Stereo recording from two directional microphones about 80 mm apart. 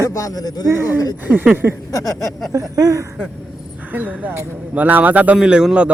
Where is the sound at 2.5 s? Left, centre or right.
Right.